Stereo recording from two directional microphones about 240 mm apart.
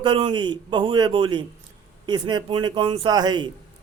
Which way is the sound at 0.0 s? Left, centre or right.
Centre.